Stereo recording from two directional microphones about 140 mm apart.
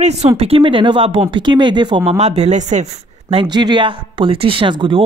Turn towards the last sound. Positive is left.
turn(degrees=-35)  # may be behind; listen again after turning